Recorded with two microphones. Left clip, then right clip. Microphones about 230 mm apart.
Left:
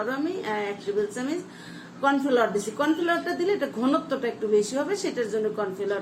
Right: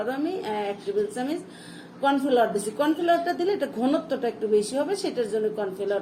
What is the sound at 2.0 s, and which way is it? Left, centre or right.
A woman's voice, centre.